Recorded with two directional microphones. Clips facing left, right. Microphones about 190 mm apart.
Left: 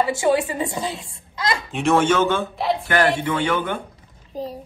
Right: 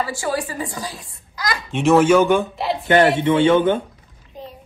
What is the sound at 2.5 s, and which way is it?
Speech, centre (ahead or behind).